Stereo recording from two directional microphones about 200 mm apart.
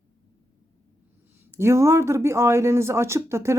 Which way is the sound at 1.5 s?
15° right (ahead or behind).